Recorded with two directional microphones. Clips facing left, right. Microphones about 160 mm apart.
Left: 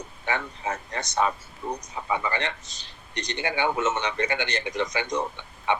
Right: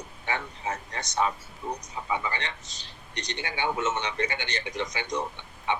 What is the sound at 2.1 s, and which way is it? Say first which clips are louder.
Speech: left 4 dB; 55° left (ahead or behind).